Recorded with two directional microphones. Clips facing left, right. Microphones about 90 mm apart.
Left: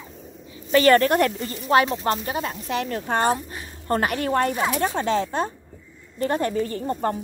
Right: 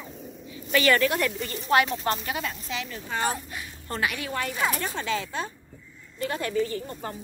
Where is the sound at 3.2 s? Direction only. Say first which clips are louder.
Left 6 dB; 35° left (ahead or behind).